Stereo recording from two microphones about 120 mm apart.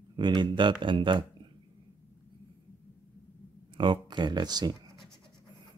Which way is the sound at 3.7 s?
40° right (ahead or behind).